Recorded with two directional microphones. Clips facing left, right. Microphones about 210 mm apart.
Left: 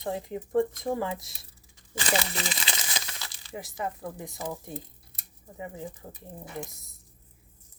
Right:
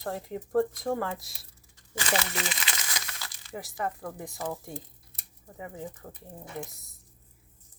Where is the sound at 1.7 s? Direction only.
25° left (ahead or behind).